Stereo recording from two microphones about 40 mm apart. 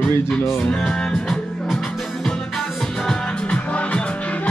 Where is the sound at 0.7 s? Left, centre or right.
Centre.